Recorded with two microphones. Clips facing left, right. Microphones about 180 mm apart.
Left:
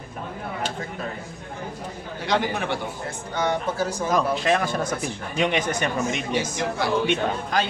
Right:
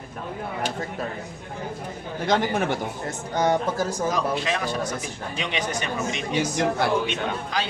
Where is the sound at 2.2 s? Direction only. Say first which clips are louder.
Right 2 dB; 45° right (ahead or behind).